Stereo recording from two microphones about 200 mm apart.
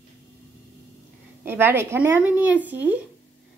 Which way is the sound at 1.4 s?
10° right (ahead or behind).